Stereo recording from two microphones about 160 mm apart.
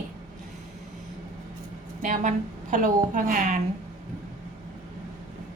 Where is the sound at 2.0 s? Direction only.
55° right (ahead or behind).